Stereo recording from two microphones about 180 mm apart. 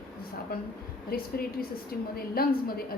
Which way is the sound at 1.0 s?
55° left (ahead or behind).